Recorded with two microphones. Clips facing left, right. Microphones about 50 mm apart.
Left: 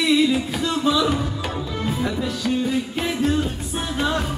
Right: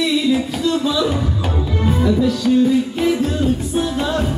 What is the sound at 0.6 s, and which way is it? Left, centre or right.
Music, centre.